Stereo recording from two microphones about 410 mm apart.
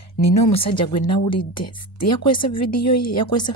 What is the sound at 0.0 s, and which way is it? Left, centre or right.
Speech, left.